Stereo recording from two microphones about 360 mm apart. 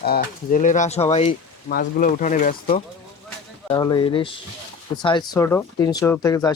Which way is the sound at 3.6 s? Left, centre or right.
Centre.